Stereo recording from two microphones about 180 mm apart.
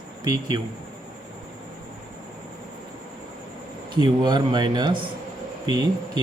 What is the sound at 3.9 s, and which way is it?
A man's voice, 25° right (ahead or behind).